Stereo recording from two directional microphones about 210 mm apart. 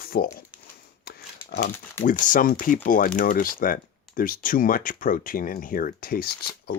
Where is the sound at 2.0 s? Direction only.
40° left (ahead or behind).